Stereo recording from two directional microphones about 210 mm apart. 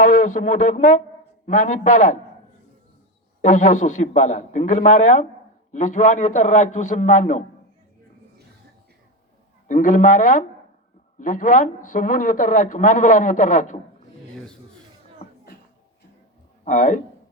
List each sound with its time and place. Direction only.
0.0 s speech: 40° left (ahead or behind)
3.4 s speech: 35° left (ahead or behind)
9.6 s speech: 40° left (ahead or behind)
16.6 s speech: 35° left (ahead or behind)